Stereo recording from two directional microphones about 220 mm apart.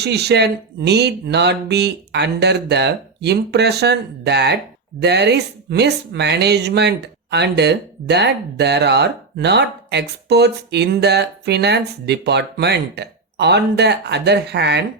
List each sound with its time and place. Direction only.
0.0 s speech: 50° right (ahead or behind)